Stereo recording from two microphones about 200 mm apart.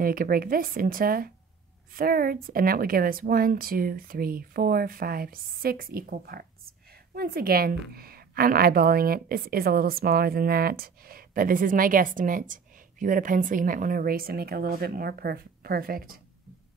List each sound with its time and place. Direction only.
0.0 s a woman's voice: 45° right (ahead or behind)